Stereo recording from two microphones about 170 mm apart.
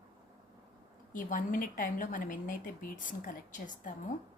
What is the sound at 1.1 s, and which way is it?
A woman's voice, 50° left (ahead or behind).